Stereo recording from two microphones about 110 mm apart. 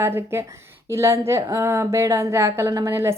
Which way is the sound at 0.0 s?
20° right (ahead or behind).